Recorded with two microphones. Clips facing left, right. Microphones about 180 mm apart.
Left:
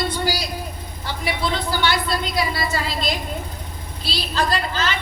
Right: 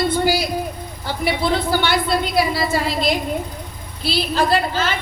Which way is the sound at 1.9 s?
55° right (ahead or behind).